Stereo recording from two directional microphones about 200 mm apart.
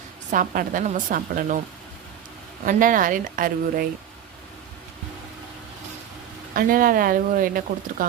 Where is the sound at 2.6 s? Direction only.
40° right (ahead or behind).